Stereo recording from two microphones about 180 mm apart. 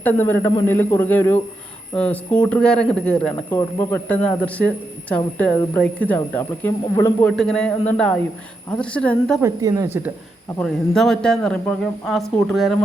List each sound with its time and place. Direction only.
0.0 s speech: 10° left (ahead or behind)
3.5 s a man's voice: 15° left (ahead or behind)
9.4 s speech: 15° right (ahead or behind)
10.6 s a man's voice: centre (ahead or behind)